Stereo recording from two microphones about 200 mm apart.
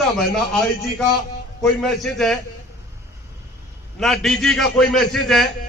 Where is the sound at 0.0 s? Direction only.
Centre (ahead or behind).